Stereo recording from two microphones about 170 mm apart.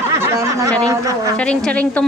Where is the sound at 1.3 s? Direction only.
5° left (ahead or behind).